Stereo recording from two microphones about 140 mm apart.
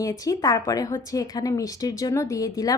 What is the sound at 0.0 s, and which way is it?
A woman's voice, 25° left (ahead or behind).